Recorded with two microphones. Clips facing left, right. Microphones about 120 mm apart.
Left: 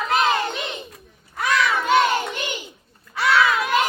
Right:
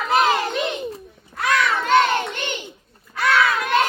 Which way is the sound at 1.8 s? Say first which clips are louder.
Right 2 dB; 10° left (ahead or behind).